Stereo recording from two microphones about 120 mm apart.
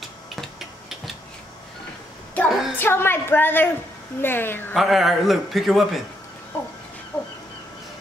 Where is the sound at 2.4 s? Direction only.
15° left (ahead or behind).